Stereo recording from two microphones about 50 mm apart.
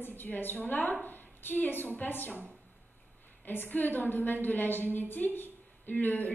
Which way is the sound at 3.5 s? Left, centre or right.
Left.